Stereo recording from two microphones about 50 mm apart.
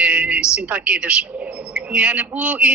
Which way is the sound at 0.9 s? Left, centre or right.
Centre.